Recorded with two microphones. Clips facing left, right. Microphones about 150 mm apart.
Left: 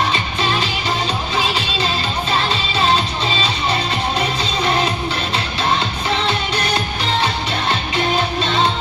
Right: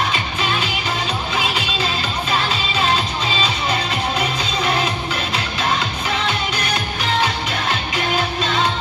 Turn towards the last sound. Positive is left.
turn(degrees=30)  # may be behind; listen again after turning